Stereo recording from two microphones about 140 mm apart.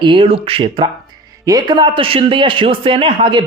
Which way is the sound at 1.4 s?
30° right (ahead or behind).